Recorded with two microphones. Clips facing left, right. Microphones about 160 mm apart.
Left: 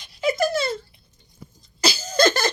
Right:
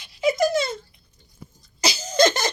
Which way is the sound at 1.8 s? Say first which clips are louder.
Right 1 dB; 20° right (ahead or behind).